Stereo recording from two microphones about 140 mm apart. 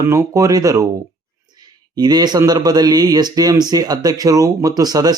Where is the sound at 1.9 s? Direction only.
30° right (ahead or behind).